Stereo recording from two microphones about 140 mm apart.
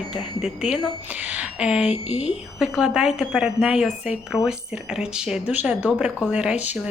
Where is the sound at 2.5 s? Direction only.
5° right (ahead or behind).